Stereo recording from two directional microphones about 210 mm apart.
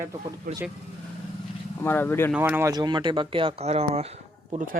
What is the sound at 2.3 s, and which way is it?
Speech, 10° right (ahead or behind).